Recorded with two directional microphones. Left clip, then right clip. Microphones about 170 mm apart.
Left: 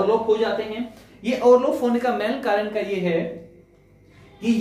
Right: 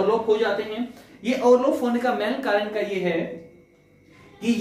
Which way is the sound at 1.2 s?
15° left (ahead or behind).